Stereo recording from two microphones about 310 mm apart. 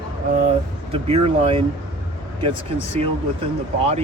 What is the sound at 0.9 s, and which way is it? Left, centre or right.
Speech, centre.